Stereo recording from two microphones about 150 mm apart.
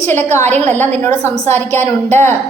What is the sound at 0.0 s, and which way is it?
A woman's voice, 15° left (ahead or behind).